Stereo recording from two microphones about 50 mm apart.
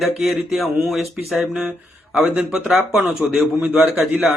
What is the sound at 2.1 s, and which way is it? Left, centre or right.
Speech, centre.